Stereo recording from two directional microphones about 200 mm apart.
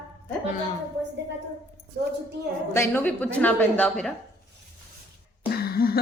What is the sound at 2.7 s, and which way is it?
Speech, 10° left (ahead or behind).